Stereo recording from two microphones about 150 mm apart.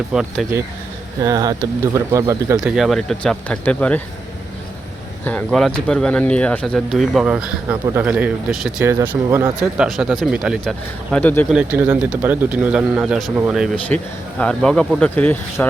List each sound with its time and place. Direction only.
0.1 s speech: 5° right (ahead or behind)
1.2 s speech: 25° right (ahead or behind)
2.6 s speech: 5° right (ahead or behind)
5.2 s speech: 10° left (ahead or behind); by 9.5 s 15° right (ahead or behind)
9.6 s speech: 5° right (ahead or behind); by 11.4 s 10° left (ahead or behind)
11.5 s speech: 10° right (ahead or behind); by 15.6 s 10° left (ahead or behind)